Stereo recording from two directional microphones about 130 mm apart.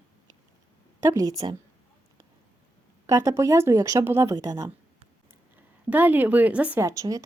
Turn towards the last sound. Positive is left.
turn(degrees=-25)  # may be behind; listen again after turning